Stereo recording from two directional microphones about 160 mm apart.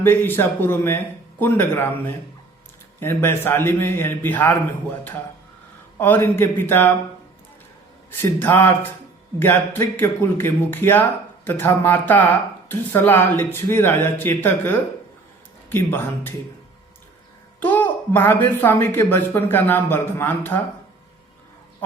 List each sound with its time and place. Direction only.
0.0 s speech: 15° left (ahead or behind)
6.0 s speech: 15° left (ahead or behind)
8.2 s speech: 15° left (ahead or behind)
17.6 s speech: 10° left (ahead or behind)